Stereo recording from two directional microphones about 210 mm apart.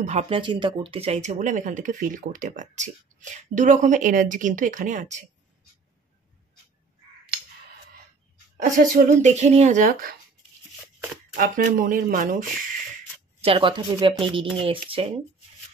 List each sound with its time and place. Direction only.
0.0 s speech: 30° right (ahead or behind)
8.9 s speech: 35° right (ahead or behind)
11.3 s speech: 40° right (ahead or behind)
13.4 s speech: 25° right (ahead or behind)